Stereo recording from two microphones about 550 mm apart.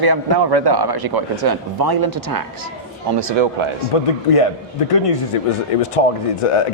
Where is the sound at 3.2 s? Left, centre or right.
Right.